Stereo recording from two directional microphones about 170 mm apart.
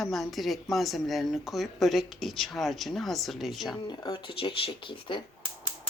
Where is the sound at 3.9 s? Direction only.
25° left (ahead or behind).